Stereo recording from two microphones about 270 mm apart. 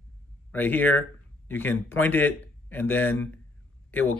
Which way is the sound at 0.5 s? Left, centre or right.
Centre.